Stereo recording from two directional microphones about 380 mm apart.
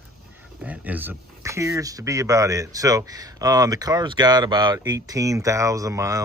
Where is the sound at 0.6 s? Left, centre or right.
Centre.